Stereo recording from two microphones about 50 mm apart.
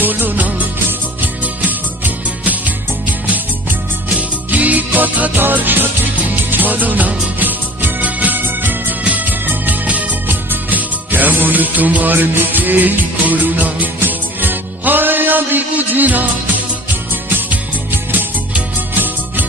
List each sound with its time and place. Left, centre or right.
0.0 s music: right